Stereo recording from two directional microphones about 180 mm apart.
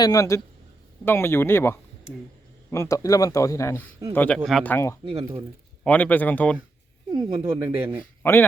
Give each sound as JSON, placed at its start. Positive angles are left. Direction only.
{"t": 0.0, "sound": "speech", "side_deg": 20}
{"t": 7.1, "sound": "speech", "side_deg": -15}
{"t": 8.2, "sound": "speech", "side_deg": 10}